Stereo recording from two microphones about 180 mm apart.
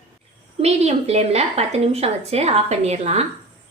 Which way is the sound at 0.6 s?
35° right (ahead or behind).